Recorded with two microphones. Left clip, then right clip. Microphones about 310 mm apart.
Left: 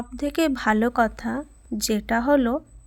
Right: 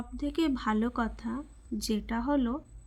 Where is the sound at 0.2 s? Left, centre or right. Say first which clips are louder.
Left 7 dB; left.